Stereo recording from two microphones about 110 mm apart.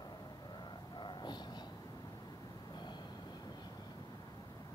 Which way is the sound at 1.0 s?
45° left (ahead or behind).